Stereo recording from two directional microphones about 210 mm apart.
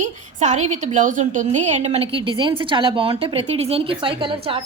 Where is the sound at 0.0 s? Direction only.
35° right (ahead or behind).